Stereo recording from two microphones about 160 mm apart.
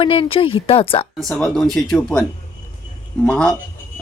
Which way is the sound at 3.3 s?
5° left (ahead or behind).